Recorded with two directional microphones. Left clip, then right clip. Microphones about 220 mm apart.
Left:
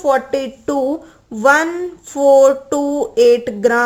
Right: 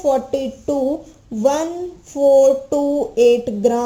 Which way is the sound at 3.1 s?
25° left (ahead or behind).